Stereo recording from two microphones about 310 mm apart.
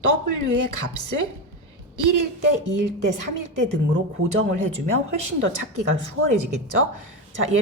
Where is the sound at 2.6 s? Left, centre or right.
Right.